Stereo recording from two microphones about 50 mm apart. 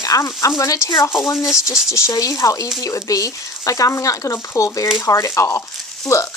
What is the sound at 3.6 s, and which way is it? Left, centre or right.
Speech, left.